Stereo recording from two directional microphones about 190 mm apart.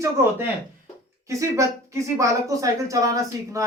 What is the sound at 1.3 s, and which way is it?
Speech, 15° right (ahead or behind).